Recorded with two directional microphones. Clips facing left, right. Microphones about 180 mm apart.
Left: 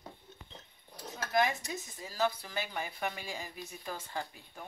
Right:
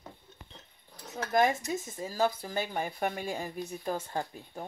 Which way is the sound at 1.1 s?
45° right (ahead or behind).